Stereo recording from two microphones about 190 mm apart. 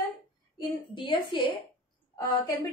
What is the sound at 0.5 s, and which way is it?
Speech, 25° left (ahead or behind).